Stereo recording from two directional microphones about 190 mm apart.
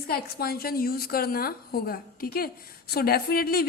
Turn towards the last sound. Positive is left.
turn(degrees=55)  # may be behind; listen again after turning